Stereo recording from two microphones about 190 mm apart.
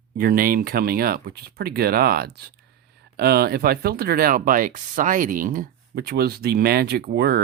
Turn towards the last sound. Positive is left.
turn(degrees=-55)  # may be behind; listen again after turning